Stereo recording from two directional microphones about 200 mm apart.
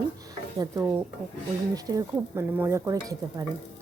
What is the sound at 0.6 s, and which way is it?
Speech, 15° right (ahead or behind).